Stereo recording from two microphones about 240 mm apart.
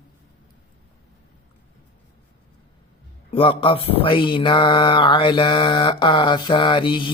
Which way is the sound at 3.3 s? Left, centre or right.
Left.